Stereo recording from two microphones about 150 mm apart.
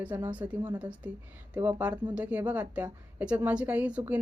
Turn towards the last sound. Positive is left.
turn(degrees=-10)  # may be behind; listen again after turning